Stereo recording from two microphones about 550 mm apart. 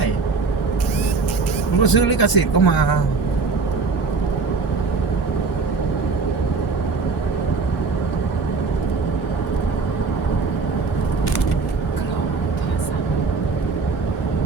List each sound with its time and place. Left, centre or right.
1.8 s speech: left